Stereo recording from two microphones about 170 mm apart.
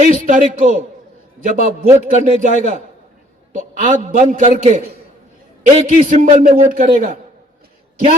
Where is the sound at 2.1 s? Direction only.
45° right (ahead or behind).